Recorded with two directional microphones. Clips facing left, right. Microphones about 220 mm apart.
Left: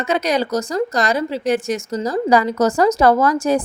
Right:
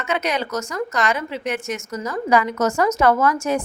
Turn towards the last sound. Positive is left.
turn(degrees=35)  # may be behind; listen again after turning